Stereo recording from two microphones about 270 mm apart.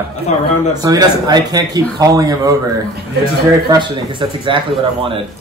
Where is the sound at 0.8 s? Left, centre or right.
Centre.